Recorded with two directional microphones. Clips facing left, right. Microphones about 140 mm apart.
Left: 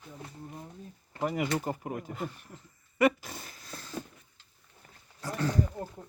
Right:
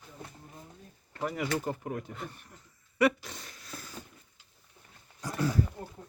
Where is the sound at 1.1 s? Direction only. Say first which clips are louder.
Left 2 dB; 15° left (ahead or behind).